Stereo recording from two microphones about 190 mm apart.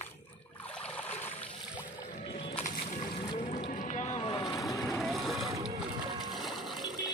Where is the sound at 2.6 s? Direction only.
45° left (ahead or behind).